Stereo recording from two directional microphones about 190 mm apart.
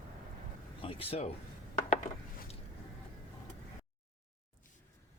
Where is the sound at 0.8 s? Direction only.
30° left (ahead or behind).